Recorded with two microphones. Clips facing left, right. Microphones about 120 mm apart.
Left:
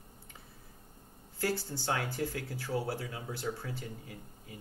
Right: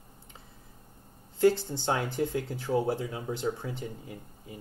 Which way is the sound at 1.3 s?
20° right (ahead or behind).